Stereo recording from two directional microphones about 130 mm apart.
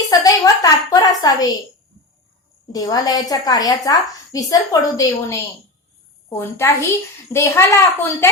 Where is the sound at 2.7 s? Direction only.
30° left (ahead or behind).